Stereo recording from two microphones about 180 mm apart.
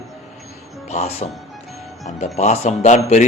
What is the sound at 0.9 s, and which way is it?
A man's voice, 35° left (ahead or behind).